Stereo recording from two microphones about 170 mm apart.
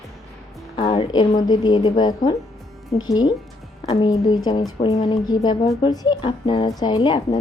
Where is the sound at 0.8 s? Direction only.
30° left (ahead or behind).